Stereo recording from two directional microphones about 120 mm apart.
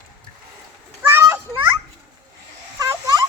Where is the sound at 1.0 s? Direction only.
20° right (ahead or behind).